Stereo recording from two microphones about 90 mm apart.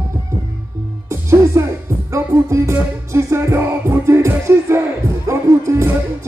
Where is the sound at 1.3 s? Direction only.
35° right (ahead or behind).